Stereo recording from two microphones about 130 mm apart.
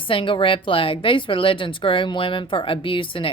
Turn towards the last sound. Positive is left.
turn(degrees=40)  # may be behind; listen again after turning